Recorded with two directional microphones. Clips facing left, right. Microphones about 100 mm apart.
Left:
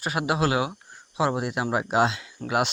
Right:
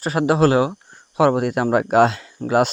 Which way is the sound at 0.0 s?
35° right (ahead or behind).